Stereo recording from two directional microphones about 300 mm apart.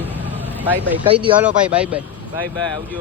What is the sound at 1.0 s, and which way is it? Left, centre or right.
Speech, centre.